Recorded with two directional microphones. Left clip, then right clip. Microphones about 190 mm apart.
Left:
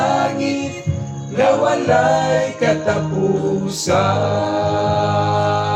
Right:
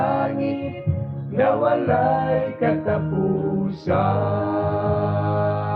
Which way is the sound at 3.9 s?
10° left (ahead or behind).